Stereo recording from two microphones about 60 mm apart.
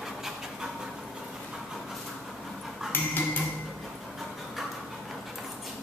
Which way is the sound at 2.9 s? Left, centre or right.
Left.